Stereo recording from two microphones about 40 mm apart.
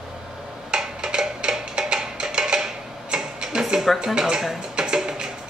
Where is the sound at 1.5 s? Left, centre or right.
Centre.